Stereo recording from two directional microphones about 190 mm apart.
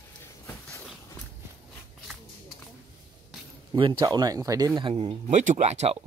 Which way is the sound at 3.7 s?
25° right (ahead or behind).